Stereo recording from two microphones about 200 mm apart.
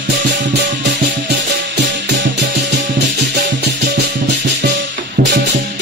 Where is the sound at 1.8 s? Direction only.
60° right (ahead or behind).